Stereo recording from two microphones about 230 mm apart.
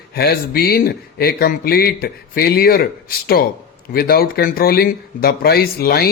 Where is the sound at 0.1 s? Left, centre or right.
Left.